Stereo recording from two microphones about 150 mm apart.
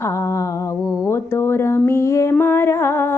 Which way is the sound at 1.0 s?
15° left (ahead or behind).